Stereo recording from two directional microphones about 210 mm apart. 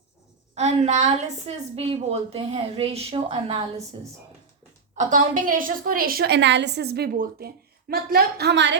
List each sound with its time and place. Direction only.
0.5 s a woman's voice: 30° right (ahead or behind)
4.9 s a woman's voice: 35° right (ahead or behind); by 8.8 s 55° right (ahead or behind)